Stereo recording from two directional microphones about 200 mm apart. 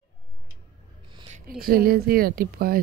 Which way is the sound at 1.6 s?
50° right (ahead or behind).